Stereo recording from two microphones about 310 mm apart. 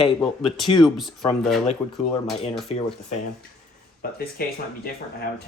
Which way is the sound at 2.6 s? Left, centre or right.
Centre.